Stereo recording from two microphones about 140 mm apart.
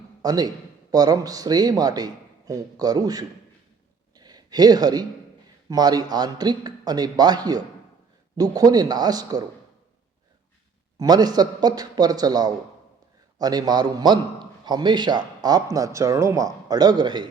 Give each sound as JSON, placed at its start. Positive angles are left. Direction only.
{"t": 0.2, "sound": "a man's voice", "side_deg": -30}
{"t": 4.1, "sound": "a sound", "side_deg": -30}
{"t": 5.6, "sound": "speech", "side_deg": -25}
{"t": 10.9, "sound": "speech", "side_deg": -25}